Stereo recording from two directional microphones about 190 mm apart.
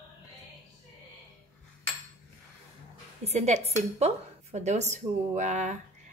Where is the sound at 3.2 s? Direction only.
35° right (ahead or behind).